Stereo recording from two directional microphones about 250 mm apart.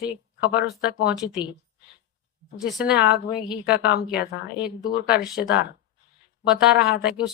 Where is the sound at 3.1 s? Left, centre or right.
Left.